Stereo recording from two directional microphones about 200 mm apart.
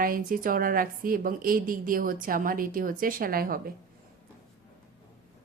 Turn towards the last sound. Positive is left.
turn(degrees=-45)  # may be behind; listen again after turning